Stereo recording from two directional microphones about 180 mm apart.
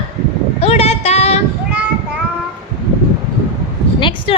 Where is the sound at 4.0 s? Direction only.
25° left (ahead or behind).